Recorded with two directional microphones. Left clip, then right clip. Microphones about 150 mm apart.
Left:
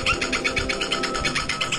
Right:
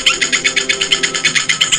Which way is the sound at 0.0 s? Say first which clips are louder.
Right 9 dB; 5° right (ahead or behind).